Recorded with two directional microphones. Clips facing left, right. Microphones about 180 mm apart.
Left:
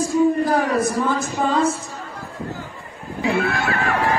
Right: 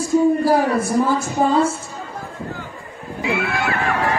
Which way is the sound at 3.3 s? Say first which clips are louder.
Left 2 dB; 45° left (ahead or behind).